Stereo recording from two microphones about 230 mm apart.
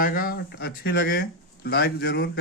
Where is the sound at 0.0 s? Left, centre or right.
Left.